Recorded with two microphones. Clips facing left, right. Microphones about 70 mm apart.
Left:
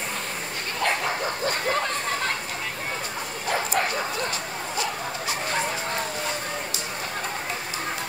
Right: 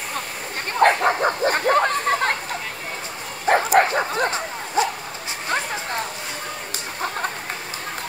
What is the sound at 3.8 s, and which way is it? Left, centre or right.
Dog, right.